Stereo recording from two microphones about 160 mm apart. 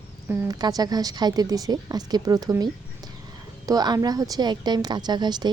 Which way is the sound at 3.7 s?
25° right (ahead or behind).